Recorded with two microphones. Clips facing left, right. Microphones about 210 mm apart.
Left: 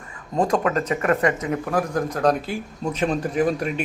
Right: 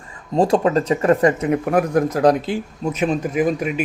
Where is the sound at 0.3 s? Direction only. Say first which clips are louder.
Right 5 dB; 30° right (ahead or behind).